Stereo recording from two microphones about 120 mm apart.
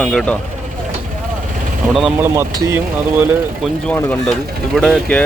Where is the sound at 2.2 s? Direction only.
20° right (ahead or behind).